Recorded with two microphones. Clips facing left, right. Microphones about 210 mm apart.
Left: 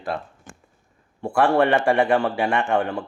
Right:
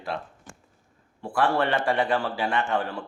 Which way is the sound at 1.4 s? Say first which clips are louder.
Left 6 dB; 65° left (ahead or behind).